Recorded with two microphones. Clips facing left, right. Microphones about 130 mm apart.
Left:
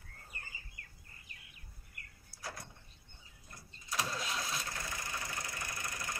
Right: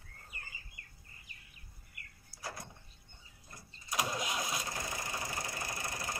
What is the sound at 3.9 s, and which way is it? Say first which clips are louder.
Vehicle: right 3 dB; 15° right (ahead or behind).